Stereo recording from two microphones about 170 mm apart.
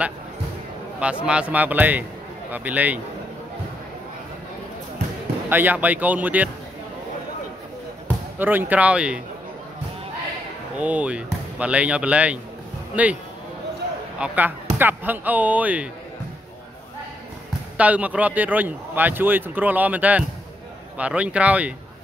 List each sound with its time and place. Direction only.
1.2 s a man's voice: 5° right (ahead or behind)
5.5 s a man's voice: 10° right (ahead or behind)
8.4 s a man's voice: 10° right (ahead or behind)
10.8 s a man's voice: 10° right (ahead or behind)
14.2 s a man's voice: 10° right (ahead or behind)
17.7 s a man's voice: 10° right (ahead or behind)